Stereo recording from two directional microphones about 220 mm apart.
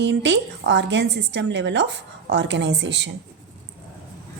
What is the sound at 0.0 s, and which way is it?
A woman's voice, 55° right (ahead or behind).